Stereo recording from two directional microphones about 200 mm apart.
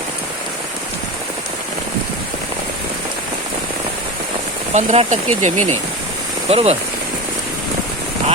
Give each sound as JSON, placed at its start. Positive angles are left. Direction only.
{"t": 4.7, "sound": "speech", "side_deg": -35}